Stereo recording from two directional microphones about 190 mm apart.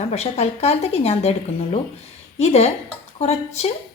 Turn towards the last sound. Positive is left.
turn(degrees=35)  # may be behind; listen again after turning